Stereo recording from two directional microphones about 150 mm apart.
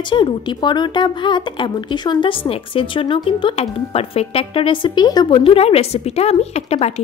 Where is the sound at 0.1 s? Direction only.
30° left (ahead or behind).